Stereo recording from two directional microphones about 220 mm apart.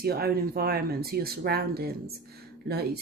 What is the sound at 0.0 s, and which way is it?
Speech, 45° right (ahead or behind).